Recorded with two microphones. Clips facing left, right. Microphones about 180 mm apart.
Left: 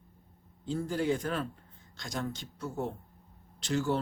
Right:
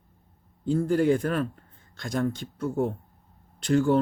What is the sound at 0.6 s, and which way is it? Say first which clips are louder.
A man's voice: right 9 dB; 50° right (ahead or behind).